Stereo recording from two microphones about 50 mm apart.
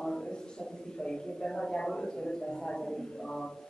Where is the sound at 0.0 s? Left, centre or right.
Centre.